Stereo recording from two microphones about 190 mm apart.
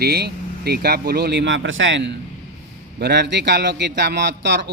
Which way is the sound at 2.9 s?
60° right (ahead or behind).